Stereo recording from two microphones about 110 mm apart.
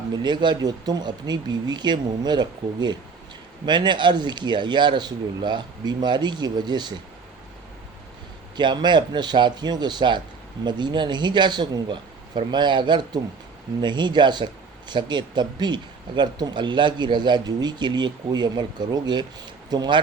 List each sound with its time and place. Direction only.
0.2 s speech: 45° right (ahead or behind)
8.5 s speech: 45° right (ahead or behind)